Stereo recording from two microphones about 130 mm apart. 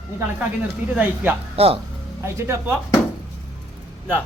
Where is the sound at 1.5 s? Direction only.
50° right (ahead or behind).